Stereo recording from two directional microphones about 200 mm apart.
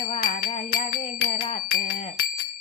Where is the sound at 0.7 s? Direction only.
45° left (ahead or behind).